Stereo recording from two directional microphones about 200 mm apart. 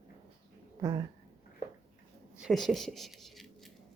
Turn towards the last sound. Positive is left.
turn(degrees=0)  # may be behind; listen again after turning